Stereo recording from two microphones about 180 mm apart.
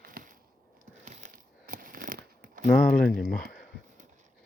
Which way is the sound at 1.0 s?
45° right (ahead or behind).